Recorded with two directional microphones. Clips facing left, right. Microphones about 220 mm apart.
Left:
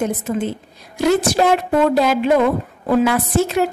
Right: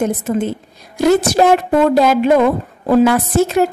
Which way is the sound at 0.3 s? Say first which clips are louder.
Right 3 dB; 50° right (ahead or behind).